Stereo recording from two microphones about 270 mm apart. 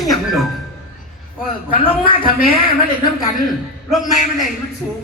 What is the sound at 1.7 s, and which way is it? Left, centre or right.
Speech, centre.